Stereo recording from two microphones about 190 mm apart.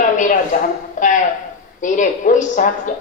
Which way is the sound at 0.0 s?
45° left (ahead or behind).